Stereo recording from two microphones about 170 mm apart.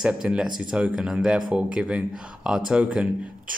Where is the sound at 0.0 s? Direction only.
5° right (ahead or behind).